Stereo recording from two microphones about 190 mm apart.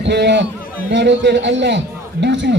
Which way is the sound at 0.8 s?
65° right (ahead or behind).